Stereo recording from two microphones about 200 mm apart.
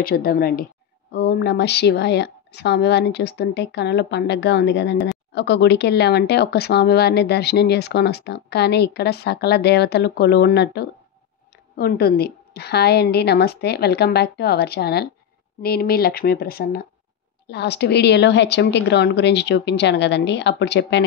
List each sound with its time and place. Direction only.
0.0 s a woman's voice: 50° left (ahead or behind)